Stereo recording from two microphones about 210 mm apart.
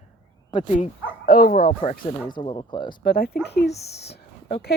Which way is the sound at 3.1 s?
45° left (ahead or behind).